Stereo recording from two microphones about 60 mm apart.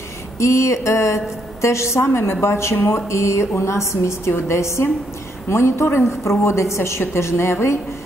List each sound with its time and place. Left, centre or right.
0.4 s a woman's voice: left